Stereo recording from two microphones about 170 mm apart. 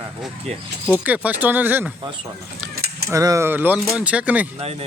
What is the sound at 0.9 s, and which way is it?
Speech, 10° right (ahead or behind).